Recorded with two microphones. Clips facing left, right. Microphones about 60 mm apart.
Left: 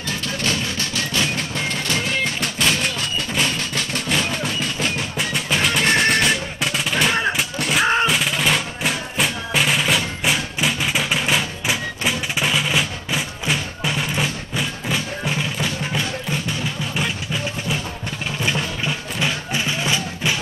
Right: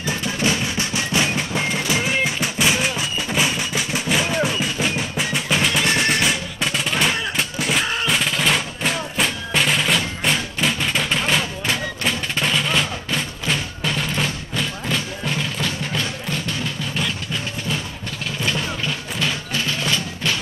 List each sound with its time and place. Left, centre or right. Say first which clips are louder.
0.0 s music: right 3 dB; centre
4.5 s drum: right 1 dB; centre
7.3 s a sound: even; centre
7.8 s drum: left 6 dB; left
8.1 s music: even; centre